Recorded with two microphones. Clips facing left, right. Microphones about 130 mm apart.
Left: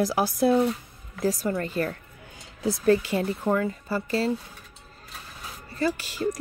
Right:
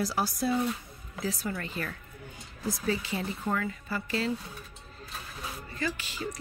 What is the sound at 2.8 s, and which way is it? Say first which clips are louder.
Speech: left 11 dB; 55° left (ahead or behind).